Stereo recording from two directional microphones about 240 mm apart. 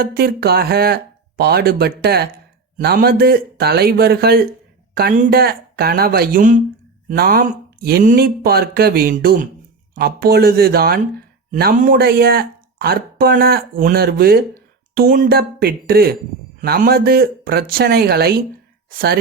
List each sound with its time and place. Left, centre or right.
0.0 s speech: right